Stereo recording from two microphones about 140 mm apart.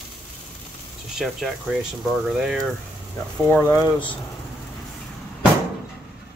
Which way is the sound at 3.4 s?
10° left (ahead or behind).